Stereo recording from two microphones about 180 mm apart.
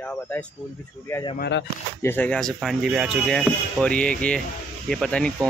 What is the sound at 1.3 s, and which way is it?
Speech, 70° left (ahead or behind).